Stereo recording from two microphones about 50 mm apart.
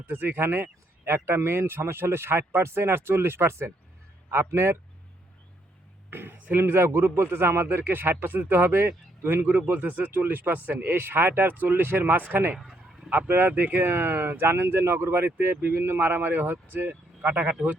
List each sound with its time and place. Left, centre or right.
0.0 s a man's voice: right
6.1 s a sound: right
6.6 s speech: right
12.5 s bow-wow: centre
13.1 s speech: right